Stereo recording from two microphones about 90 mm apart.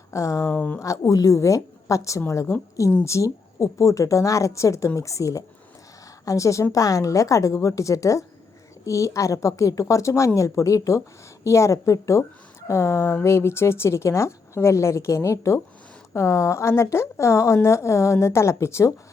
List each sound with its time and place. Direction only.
0.1 s a woman's voice: 35° left (ahead or behind)
0.5 s speech: 20° left (ahead or behind)
0.8 s a woman's voice: 35° left (ahead or behind)